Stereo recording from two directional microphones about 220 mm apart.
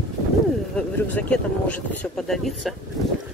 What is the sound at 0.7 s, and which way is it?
Speech, 5° left (ahead or behind).